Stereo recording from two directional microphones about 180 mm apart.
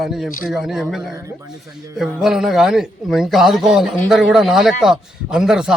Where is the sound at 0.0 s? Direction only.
Centre (ahead or behind).